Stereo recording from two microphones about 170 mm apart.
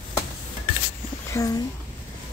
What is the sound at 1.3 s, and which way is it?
Speech, 20° left (ahead or behind).